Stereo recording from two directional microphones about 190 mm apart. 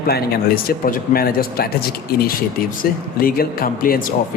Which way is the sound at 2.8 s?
50° left (ahead or behind).